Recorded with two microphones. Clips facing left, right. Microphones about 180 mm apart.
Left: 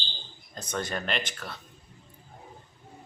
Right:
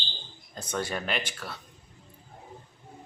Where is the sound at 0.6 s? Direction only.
10° right (ahead or behind).